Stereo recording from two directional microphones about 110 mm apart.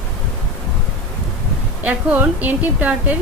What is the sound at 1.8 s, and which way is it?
Speech, 15° right (ahead or behind).